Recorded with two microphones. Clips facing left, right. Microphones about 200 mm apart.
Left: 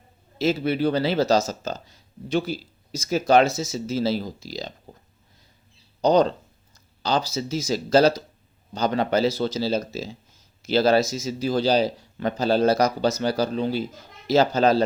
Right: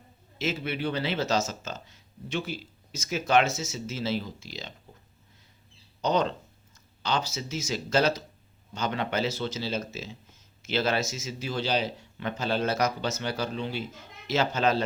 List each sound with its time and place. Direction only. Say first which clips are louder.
0.3 s speech: left 9 dB; 35° left (ahead or behind)
6.0 s speech: left 8 dB; 35° left (ahead or behind)